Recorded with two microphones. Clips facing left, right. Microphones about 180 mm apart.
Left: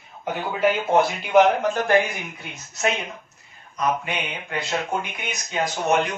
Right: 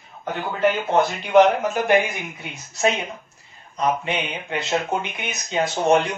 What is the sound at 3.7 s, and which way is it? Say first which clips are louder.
Speech: right 2 dB; 25° right (ahead or behind).